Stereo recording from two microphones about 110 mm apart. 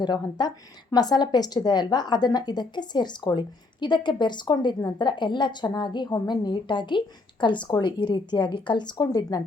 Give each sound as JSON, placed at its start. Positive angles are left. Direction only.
{"t": 0.0, "sound": "a woman's voice", "side_deg": 40}